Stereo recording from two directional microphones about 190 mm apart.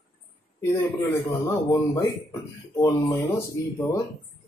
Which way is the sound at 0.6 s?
15° left (ahead or behind).